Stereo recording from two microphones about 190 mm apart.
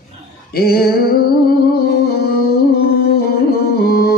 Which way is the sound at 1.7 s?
55° left (ahead or behind).